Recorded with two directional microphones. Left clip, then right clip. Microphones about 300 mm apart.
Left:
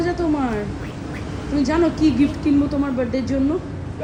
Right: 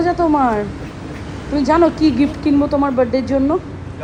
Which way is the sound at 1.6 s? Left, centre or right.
Centre.